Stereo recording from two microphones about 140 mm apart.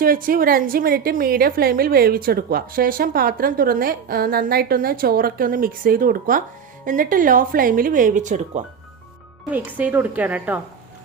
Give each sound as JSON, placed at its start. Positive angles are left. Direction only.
{"t": 0.0, "sound": "a woman's voice", "side_deg": -90}
{"t": 9.5, "sound": "a woman's voice", "side_deg": -10}